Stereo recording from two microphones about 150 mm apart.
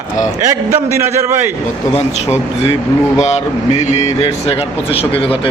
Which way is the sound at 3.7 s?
50° left (ahead or behind).